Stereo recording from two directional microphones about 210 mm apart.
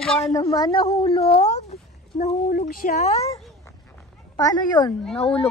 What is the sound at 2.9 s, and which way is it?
Speech, 35° left (ahead or behind).